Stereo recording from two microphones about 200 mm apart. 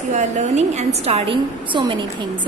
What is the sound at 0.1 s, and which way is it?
A woman's voice, 35° right (ahead or behind).